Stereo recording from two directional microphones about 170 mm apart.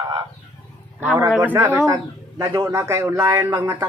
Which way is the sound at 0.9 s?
10° right (ahead or behind).